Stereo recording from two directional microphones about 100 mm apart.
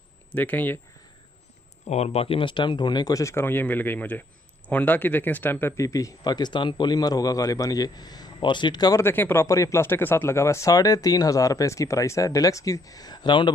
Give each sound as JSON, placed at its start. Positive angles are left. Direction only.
{"t": 0.3, "sound": "speech", "side_deg": 20}
{"t": 1.9, "sound": "speech", "side_deg": 90}
{"t": 9.0, "sound": "speech", "side_deg": 20}